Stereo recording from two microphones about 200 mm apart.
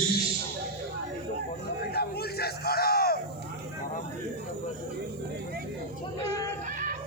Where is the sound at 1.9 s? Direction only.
50° left (ahead or behind).